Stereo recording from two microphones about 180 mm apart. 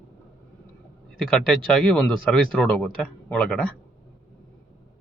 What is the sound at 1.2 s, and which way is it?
Speech, 5° left (ahead or behind).